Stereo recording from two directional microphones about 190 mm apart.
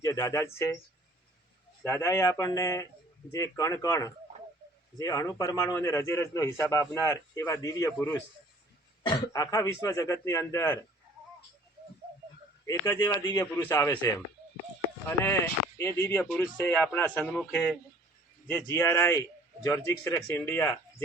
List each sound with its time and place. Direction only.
0.0 s speech: 15° left (ahead or behind)
1.8 s a man's voice: 15° left (ahead or behind)
9.0 s a man's voice: 20° left (ahead or behind)
12.6 s a man's voice: 15° left (ahead or behind)